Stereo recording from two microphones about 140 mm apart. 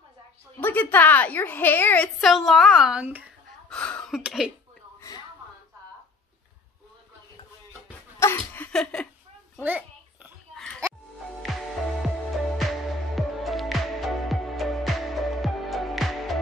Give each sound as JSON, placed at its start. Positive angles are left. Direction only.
{"t": 0.6, "sound": "a woman's voice", "side_deg": 10}
{"t": 2.1, "sound": "a woman's voice", "side_deg": 0}
{"t": 3.6, "sound": "cough", "side_deg": 10}
{"t": 4.2, "sound": "a woman's voice", "side_deg": -5}
{"t": 8.2, "sound": "a sound", "side_deg": 15}
{"t": 8.7, "sound": "speech", "side_deg": 5}
{"t": 9.6, "sound": "a child's voice", "side_deg": -10}
{"t": 11.5, "sound": "music", "side_deg": 0}